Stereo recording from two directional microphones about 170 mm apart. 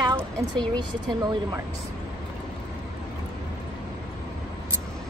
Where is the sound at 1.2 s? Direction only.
25° right (ahead or behind).